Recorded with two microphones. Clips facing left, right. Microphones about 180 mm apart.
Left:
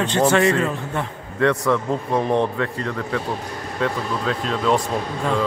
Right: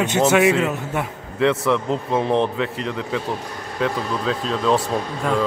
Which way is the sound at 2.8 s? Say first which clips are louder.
Even; 15° right (ahead or behind).